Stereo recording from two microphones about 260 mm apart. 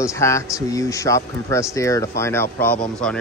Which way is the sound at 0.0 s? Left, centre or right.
Centre.